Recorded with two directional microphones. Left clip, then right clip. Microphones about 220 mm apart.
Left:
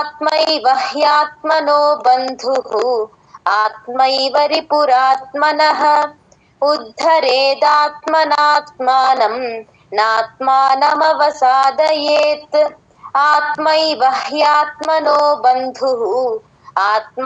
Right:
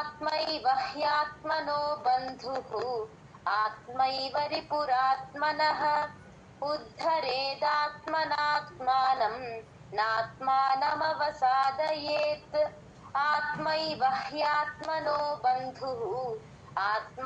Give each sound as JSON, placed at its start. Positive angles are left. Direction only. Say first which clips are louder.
{"t": 0.0, "sound": "child singing", "louder": "left 16 dB", "side_deg": 45}